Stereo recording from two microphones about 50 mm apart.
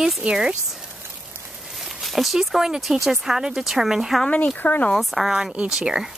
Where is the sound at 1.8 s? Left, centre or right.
Centre.